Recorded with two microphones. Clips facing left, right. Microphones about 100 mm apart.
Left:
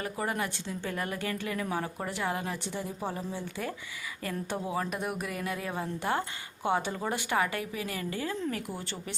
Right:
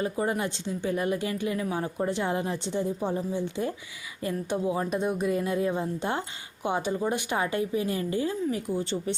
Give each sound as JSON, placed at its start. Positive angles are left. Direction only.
{"t": 0.0, "sound": "speech", "side_deg": -25}